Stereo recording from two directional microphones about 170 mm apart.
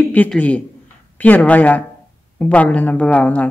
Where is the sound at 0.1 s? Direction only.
10° left (ahead or behind).